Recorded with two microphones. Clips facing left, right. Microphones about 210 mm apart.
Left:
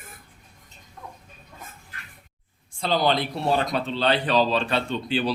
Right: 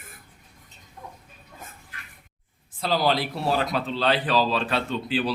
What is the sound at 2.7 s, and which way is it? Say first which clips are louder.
Speech: left 1 dB; 5° right (ahead or behind).